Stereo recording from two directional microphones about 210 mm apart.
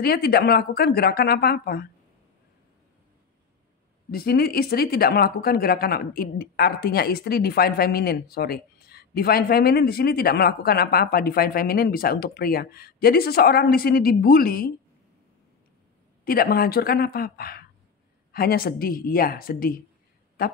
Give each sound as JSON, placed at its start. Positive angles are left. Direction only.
{"t": 0.0, "sound": "speech", "side_deg": 45}
{"t": 4.1, "sound": "speech", "side_deg": 45}
{"t": 16.3, "sound": "speech", "side_deg": 45}